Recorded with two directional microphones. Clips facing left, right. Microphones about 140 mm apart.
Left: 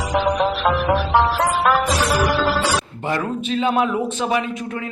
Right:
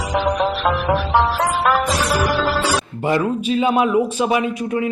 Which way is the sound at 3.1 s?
10° right (ahead or behind).